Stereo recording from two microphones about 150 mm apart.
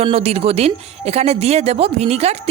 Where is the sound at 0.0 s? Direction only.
40° right (ahead or behind).